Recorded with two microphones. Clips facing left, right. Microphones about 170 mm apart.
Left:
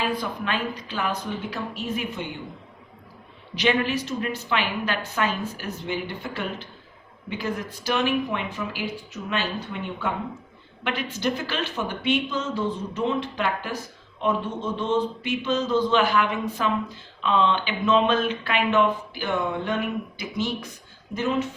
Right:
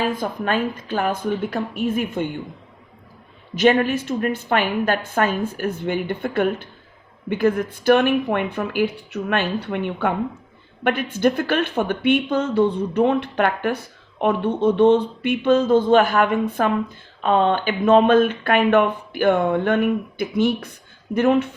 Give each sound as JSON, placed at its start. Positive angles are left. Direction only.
{"t": 0.0, "sound": "a woman's voice", "side_deg": -45}
{"t": 3.5, "sound": "a woman's voice", "side_deg": -50}